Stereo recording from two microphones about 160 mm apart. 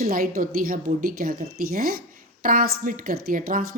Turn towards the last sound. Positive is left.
turn(degrees=-60)  # may be behind; listen again after turning